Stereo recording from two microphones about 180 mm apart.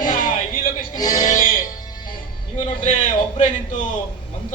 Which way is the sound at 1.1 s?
45° left (ahead or behind).